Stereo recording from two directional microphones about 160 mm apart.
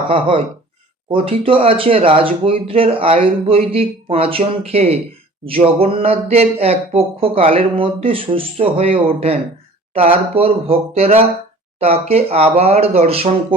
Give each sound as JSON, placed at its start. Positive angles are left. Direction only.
{"t": 0.1, "sound": "speech", "side_deg": -35}